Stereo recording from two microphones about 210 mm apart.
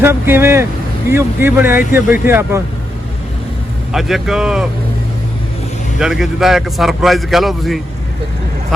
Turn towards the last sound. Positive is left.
turn(degrees=0)  # may be behind; listen again after turning